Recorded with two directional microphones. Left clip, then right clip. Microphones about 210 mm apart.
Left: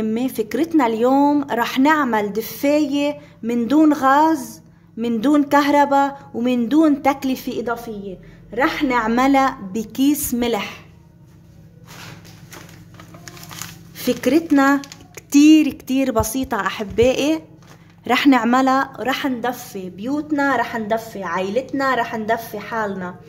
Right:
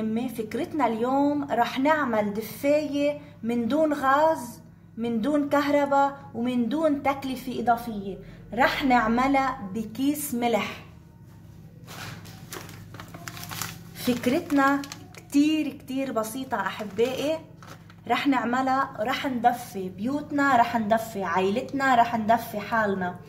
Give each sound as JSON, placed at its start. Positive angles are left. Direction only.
{"t": 0.0, "sound": "a woman's voice", "side_deg": 55}
{"t": 13.9, "sound": "a woman's voice", "side_deg": 55}